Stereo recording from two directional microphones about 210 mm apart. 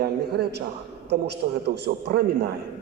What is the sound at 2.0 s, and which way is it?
Speech, 50° right (ahead or behind).